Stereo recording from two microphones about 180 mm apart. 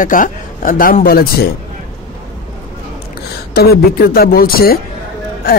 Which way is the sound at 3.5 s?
60° left (ahead or behind).